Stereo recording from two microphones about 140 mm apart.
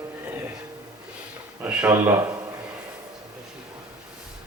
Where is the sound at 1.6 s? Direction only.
10° right (ahead or behind).